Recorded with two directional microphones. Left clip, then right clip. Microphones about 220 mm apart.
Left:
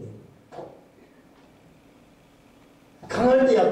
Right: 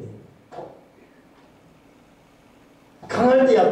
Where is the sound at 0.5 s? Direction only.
Centre (ahead or behind).